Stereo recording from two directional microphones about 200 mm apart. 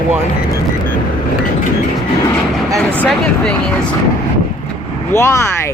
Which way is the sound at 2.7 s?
5° left (ahead or behind).